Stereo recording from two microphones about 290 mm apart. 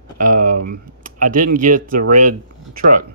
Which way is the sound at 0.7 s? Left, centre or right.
Right.